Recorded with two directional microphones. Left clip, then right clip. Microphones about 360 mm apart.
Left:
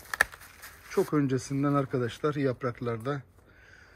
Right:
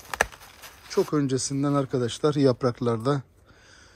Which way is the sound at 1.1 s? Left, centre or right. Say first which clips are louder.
Right 3 dB; centre.